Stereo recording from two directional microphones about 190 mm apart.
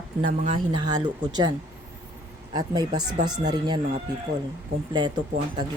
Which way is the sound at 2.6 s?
20° right (ahead or behind).